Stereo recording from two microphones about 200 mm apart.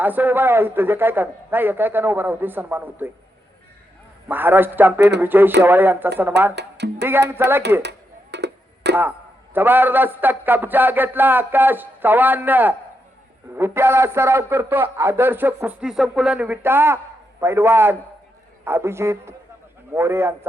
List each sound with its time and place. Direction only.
0.0 s a man's voice: 10° right (ahead or behind)
4.3 s a man's voice: 10° right (ahead or behind)
6.6 s speech: 60° right (ahead or behind)
7.1 s a man's voice: 10° right (ahead or behind)
7.8 s music: 55° right (ahead or behind)
9.0 s a man's voice: 10° right (ahead or behind)